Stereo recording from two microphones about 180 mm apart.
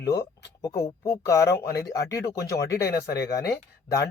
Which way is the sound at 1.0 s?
15° left (ahead or behind).